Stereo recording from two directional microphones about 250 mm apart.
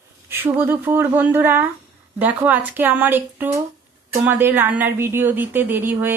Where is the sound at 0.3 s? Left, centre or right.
Centre.